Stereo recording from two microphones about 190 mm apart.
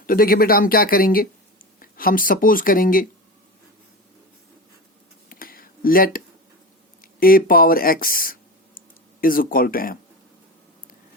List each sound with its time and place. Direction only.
0.0 s speech: 50° left (ahead or behind)
5.3 s a sound: 50° left (ahead or behind)
7.0 s speech: 50° left (ahead or behind)